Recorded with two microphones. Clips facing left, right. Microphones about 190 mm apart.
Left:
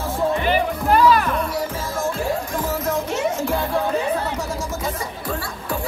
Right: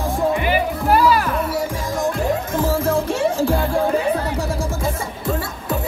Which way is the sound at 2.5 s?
30° right (ahead or behind).